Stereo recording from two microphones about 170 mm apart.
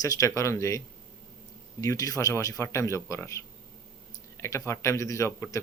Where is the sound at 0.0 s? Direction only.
20° left (ahead or behind).